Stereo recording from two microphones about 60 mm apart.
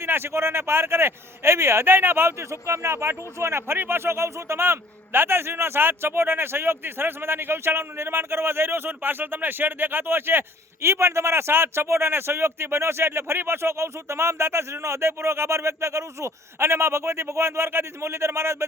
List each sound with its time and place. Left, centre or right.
0.0 s speech: right